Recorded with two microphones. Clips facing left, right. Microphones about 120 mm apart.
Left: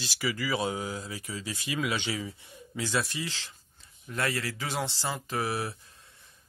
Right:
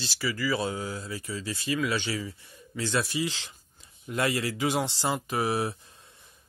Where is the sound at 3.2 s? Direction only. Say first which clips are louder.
Right 6 dB; 20° right (ahead or behind).